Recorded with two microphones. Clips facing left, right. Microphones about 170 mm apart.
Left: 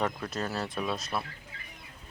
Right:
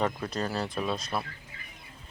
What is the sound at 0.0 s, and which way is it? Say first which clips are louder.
Speech: right 2 dB; centre (ahead or behind).